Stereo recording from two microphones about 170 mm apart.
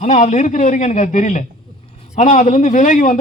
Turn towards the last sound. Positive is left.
turn(degrees=50)  # may be behind; listen again after turning